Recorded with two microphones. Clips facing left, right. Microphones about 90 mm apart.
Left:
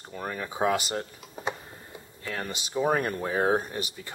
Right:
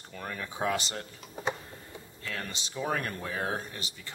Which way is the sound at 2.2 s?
25° left (ahead or behind).